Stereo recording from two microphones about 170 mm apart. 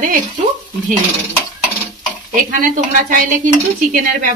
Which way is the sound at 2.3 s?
55° right (ahead or behind).